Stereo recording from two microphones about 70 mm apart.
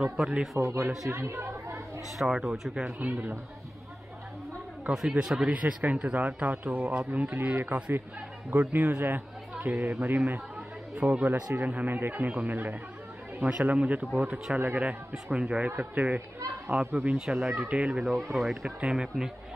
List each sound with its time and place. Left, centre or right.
0.2 s speech: centre
0.6 s speech: right
2.1 s speech: centre
3.0 s a man's voice: right
5.1 s speech: centre
5.5 s a man's voice: right
15.3 s a man's voice: centre
17.2 s speech: centre
17.6 s a man's voice: centre
18.0 s speech: centre